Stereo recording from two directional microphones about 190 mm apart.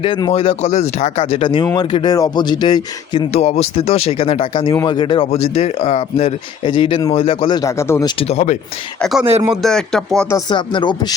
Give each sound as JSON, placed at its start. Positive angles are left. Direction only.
{"t": 0.0, "sound": "speech", "side_deg": 25}
{"t": 8.2, "sound": "speech", "side_deg": 35}
{"t": 9.0, "sound": "speech", "side_deg": 0}
{"t": 10.2, "sound": "speech", "side_deg": 20}